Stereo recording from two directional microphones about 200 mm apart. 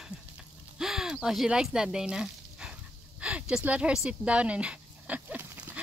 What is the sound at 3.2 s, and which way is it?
Dog, 5° right (ahead or behind).